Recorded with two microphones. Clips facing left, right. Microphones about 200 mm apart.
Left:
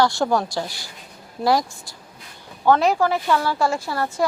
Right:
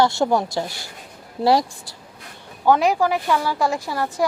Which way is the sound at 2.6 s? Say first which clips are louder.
Even; 15° right (ahead or behind).